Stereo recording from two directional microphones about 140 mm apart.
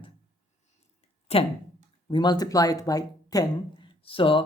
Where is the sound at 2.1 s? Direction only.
30° left (ahead or behind).